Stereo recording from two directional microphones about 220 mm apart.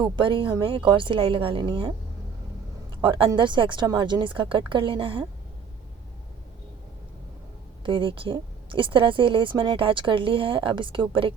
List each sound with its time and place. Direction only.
0.0 s speech: 25° right (ahead or behind)
2.9 s speech: 20° right (ahead or behind)
7.9 s speech: 25° right (ahead or behind)